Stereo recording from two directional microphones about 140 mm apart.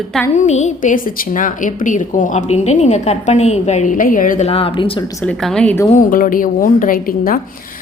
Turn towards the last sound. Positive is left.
turn(degrees=90)